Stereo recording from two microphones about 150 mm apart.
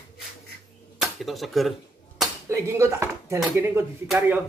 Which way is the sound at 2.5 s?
20° right (ahead or behind).